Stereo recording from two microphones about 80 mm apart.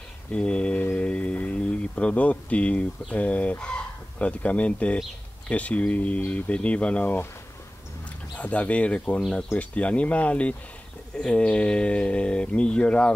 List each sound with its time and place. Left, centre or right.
0.3 s speech: centre
8.4 s speech: centre